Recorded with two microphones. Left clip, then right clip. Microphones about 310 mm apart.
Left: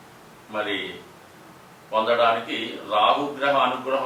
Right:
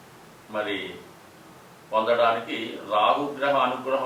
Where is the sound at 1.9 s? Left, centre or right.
Centre.